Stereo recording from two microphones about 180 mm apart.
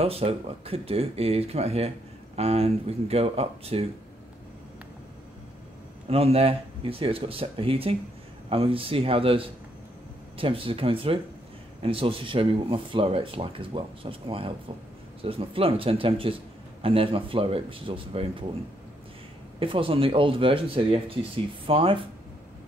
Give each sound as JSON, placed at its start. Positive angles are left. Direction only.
{"t": 0.0, "sound": "speech", "side_deg": -35}
{"t": 6.0, "sound": "speech", "side_deg": -35}
{"t": 19.6, "sound": "speech", "side_deg": -30}